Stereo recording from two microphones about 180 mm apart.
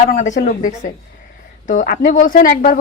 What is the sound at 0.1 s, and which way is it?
Speech, 45° left (ahead or behind).